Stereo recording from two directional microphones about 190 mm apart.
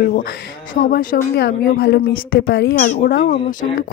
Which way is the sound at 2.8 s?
45° left (ahead or behind).